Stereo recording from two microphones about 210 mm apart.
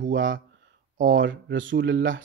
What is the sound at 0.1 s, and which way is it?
Speech, 65° right (ahead or behind).